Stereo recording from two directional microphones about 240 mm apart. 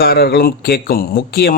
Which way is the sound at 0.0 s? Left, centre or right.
Left.